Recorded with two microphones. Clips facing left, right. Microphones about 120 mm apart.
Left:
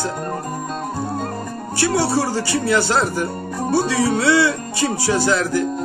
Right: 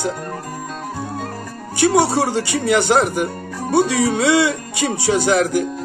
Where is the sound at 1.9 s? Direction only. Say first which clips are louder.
Right 2 dB; 65° right (ahead or behind).